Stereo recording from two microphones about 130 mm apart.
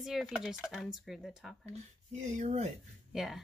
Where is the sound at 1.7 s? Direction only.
60° right (ahead or behind).